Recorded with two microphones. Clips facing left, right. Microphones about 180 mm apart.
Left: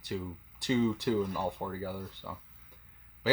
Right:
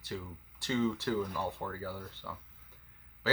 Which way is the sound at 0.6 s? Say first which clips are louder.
Left 3 dB; 15° left (ahead or behind).